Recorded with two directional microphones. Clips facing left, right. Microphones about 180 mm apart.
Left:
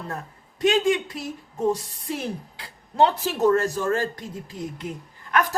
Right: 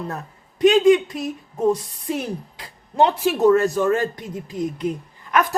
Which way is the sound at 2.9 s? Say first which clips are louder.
Right 3 dB; 15° right (ahead or behind).